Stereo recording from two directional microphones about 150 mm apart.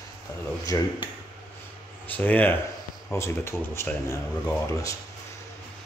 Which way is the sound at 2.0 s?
10° left (ahead or behind).